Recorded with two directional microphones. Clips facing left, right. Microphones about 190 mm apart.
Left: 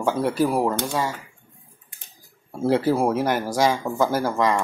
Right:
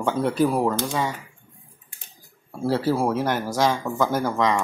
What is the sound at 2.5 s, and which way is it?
Speech, 20° left (ahead or behind).